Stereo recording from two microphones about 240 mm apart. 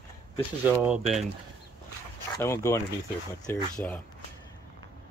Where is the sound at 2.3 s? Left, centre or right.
Centre.